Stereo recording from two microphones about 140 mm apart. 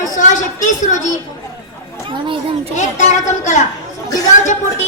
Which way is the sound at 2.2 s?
35° right (ahead or behind).